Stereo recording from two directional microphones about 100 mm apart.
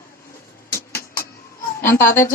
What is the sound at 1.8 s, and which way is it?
Speech, 25° left (ahead or behind).